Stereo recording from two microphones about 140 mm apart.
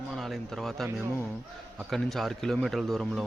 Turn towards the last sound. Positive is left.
turn(degrees=0)  # may be behind; listen again after turning